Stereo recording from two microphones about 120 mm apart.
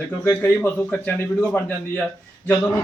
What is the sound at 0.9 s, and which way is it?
A man's voice, 10° left (ahead or behind).